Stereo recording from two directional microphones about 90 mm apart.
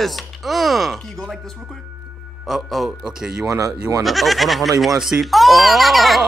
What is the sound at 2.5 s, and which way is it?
Speech, 5° right (ahead or behind).